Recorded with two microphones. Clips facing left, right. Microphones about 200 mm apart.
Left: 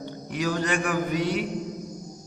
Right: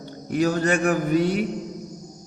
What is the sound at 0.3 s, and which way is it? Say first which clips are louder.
Music: right 6 dB; 45° right (ahead or behind).